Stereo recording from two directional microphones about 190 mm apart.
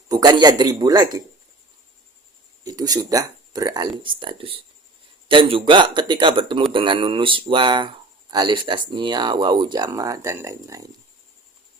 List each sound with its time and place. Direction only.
0.1 s speech: 20° right (ahead or behind)
2.6 s speech: 20° right (ahead or behind)